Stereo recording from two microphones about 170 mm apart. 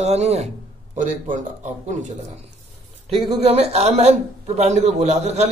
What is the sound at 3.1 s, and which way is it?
A man's voice, 35° right (ahead or behind).